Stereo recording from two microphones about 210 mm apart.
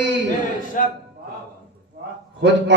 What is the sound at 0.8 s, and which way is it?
Speech, 40° left (ahead or behind).